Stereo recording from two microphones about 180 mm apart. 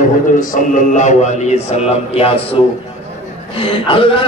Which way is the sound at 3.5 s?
30° left (ahead or behind).